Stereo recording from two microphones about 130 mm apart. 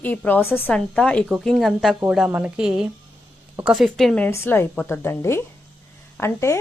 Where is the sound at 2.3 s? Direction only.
10° right (ahead or behind).